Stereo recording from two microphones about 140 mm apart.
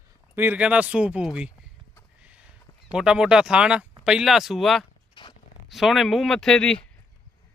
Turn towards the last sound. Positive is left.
turn(degrees=5)  # may be behind; listen again after turning